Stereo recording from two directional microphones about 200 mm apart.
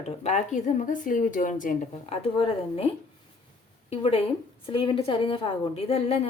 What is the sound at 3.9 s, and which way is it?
A woman's voice, 30° left (ahead or behind).